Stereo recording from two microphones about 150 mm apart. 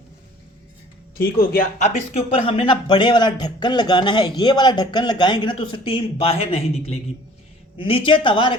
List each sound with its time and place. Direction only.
1.2 s speech: 75° left (ahead or behind)
1.8 s a man's voice: 45° left (ahead or behind)